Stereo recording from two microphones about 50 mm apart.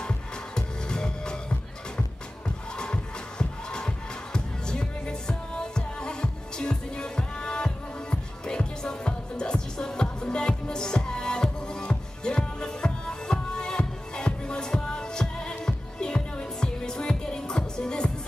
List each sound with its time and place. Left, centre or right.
0.6 s music: centre